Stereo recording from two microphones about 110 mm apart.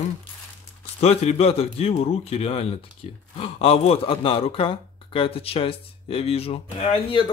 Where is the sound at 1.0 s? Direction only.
70° left (ahead or behind).